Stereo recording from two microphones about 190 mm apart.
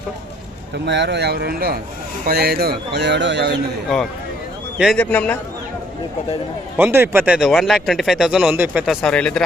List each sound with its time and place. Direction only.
0.9 s a man's voice: 65° right (ahead or behind)
4.8 s a man's voice: 5° left (ahead or behind)
6.7 s speech: 10° right (ahead or behind)
9.0 s speech: 5° left (ahead or behind)